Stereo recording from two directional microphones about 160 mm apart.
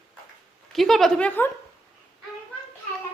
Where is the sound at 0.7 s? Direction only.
Centre (ahead or behind).